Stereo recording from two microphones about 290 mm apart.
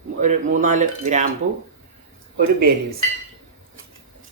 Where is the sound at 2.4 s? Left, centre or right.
Right.